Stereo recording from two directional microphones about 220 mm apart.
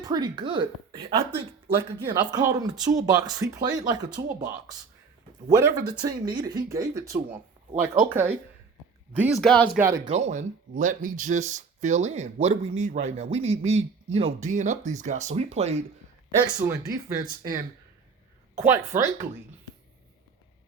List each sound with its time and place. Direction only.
0.0 s speech: 20° right (ahead or behind)
5.5 s speech: 15° right (ahead or behind); by 9.6 s 5° left (ahead or behind)
9.7 s speech: 10° right (ahead or behind)
10.1 s speech: 30° right (ahead or behind)
16.6 s speech: 15° right (ahead or behind)
18.5 s speech: 10° right (ahead or behind)